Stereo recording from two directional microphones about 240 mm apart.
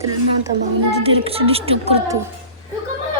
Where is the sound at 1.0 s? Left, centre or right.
Right.